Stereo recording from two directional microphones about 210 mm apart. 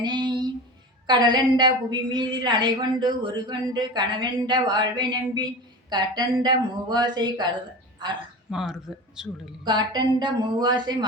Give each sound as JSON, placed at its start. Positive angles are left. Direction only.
{"t": 0.0, "sound": "a sound", "side_deg": -20}
{"t": 1.0, "sound": "a woman's voice", "side_deg": -20}
{"t": 8.4, "sound": "speech", "side_deg": -5}
{"t": 9.6, "sound": "a woman's voice", "side_deg": -20}